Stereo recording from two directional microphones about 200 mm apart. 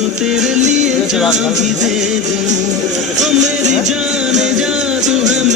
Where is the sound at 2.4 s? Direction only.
35° right (ahead or behind).